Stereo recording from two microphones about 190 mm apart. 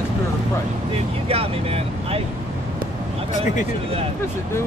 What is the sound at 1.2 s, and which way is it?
Speech, 30° right (ahead or behind).